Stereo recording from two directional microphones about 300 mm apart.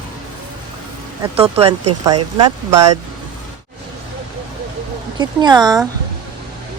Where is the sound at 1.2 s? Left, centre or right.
Centre.